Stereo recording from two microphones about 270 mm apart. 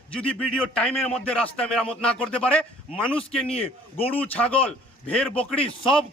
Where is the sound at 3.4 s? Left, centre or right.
Left.